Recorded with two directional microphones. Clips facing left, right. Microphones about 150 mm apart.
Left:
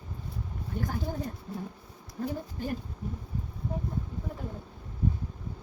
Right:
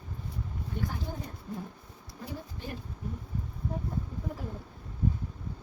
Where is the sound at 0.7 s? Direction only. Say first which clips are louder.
Left 1 dB; 45° left (ahead or behind).